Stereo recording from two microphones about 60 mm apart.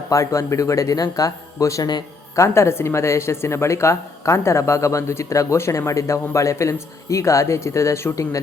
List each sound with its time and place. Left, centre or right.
0.1 s speech: left
2.3 s a woman's voice: left
8.1 s a woman's voice: left